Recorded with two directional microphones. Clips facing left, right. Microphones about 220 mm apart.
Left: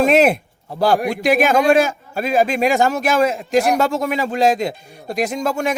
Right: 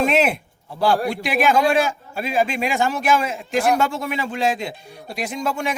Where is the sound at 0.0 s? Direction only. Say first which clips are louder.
Left 5 dB; 40° left (ahead or behind).